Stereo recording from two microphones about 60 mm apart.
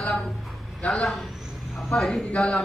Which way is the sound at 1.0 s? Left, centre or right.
Centre.